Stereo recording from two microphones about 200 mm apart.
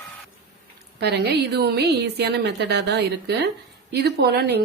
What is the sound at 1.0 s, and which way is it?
A woman's voice, 55° right (ahead or behind).